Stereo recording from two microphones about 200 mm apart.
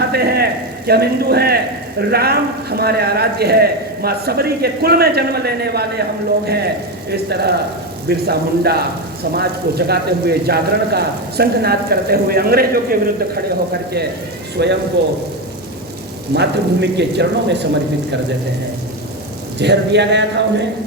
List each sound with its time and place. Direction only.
0.1 s a sound: 50° right (ahead or behind)
0.9 s a man's voice: 50° right (ahead or behind)
7.1 s a man's voice: 55° right (ahead or behind)
14.6 s a man's voice: 55° right (ahead or behind)
16.3 s speech: 55° right (ahead or behind)
19.5 s speech: 60° right (ahead or behind)